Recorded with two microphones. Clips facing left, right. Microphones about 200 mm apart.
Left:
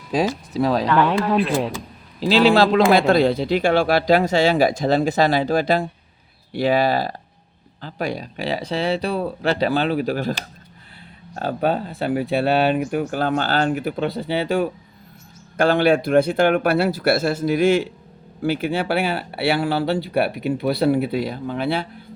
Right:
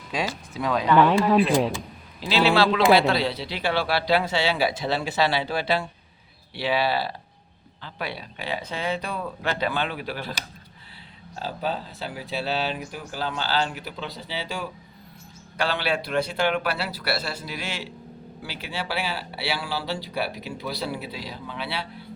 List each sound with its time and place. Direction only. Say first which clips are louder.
0.1 s speech: left 8 dB; 40° left (ahead or behind)
0.9 s speech: even; centre (ahead or behind)
2.2 s speech: left 5 dB; 45° left (ahead or behind)
11.3 s speech: left 8 dB; 60° left (ahead or behind)